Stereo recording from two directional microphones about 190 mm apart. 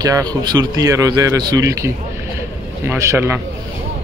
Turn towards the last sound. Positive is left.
turn(degrees=-15)  # may be behind; listen again after turning